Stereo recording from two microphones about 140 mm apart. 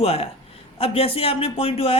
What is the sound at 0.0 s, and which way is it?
Speech, 45° left (ahead or behind).